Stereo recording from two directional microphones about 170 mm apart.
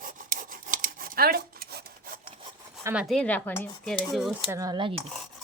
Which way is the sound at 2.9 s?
Centre (ahead or behind).